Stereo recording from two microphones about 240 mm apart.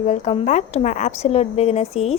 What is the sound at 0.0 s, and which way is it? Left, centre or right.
A woman's voice, left.